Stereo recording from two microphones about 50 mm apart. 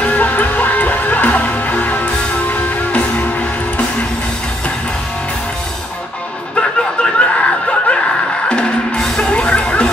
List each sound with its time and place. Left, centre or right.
0.0 s music: left
6.5 s snicker: left
8.5 s music: centre